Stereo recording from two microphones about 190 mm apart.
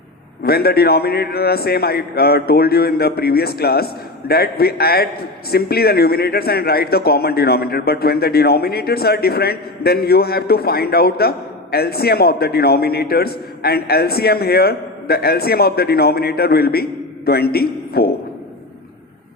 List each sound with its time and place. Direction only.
0.4 s a man's voice: 55° left (ahead or behind)